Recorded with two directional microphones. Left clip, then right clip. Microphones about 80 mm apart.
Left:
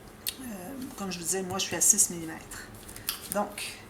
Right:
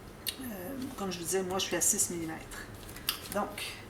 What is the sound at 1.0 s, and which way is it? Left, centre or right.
A woman's voice, left.